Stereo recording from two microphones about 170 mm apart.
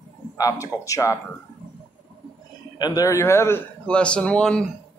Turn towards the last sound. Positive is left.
turn(degrees=5)  # may be behind; listen again after turning